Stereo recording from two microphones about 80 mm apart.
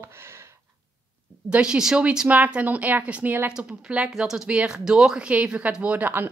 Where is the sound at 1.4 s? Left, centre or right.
Centre.